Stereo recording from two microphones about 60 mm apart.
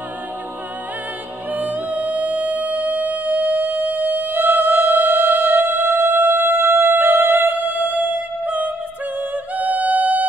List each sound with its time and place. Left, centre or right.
1.5 s music: right